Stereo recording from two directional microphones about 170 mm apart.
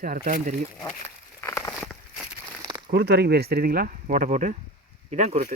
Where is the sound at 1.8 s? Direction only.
Centre (ahead or behind).